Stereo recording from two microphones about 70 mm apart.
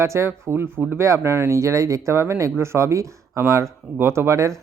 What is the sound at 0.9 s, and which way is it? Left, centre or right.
Speech, right.